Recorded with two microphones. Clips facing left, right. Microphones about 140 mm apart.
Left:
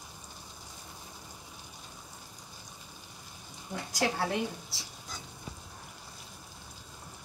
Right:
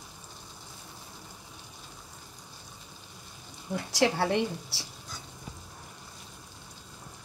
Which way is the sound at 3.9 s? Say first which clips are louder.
Right 5 dB; 70° right (ahead or behind).